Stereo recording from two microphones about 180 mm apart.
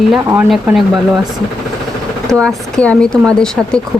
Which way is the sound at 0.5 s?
Centre (ahead or behind).